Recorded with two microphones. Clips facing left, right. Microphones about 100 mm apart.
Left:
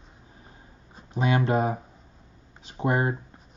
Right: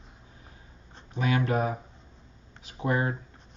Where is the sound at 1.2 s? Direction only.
30° left (ahead or behind).